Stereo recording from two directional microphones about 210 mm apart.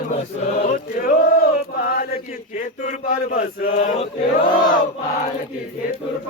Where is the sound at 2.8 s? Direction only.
35° left (ahead or behind).